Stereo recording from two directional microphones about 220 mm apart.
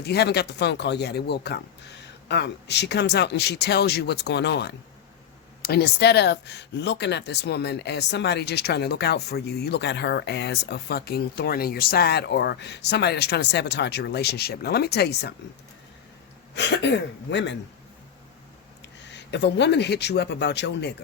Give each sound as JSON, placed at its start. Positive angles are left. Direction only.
{"t": 0.0, "sound": "speech", "side_deg": 50}
{"t": 16.6, "sound": "speech", "side_deg": 50}
{"t": 18.9, "sound": "speech", "side_deg": 55}